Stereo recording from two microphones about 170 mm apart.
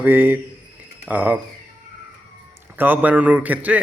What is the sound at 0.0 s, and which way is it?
A man's voice, 10° right (ahead or behind).